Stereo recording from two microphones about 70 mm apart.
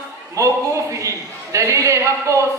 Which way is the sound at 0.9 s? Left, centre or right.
Right.